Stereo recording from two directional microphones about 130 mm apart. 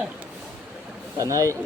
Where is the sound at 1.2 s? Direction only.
25° right (ahead or behind).